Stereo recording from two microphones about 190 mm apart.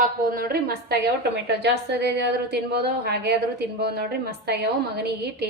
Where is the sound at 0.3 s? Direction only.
50° right (ahead or behind).